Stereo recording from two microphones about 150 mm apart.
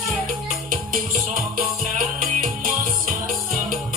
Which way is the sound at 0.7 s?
70° right (ahead or behind).